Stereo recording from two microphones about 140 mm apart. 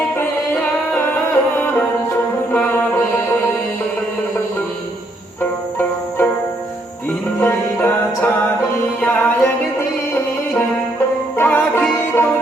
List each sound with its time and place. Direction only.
0.2 s music: 15° left (ahead or behind)
7.3 s music: 15° left (ahead or behind)
11.3 s music: 15° left (ahead or behind)